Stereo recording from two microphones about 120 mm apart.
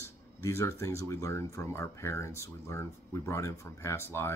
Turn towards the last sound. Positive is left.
turn(degrees=20)  # may be behind; listen again after turning